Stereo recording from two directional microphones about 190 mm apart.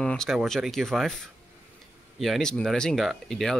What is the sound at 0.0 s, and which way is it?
Speech, 5° left (ahead or behind).